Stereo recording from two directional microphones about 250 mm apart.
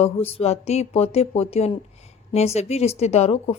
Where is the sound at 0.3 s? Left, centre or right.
Left.